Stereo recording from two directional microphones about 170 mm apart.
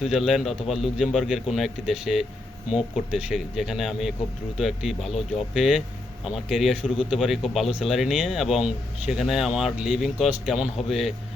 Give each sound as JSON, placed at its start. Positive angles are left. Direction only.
{"t": 0.0, "sound": "speech", "side_deg": 0}